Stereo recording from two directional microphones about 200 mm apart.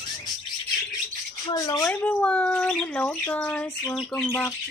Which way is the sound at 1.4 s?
20° left (ahead or behind).